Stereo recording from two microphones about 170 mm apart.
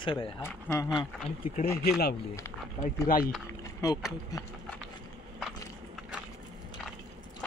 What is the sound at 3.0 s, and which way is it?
Speech, 60° left (ahead or behind).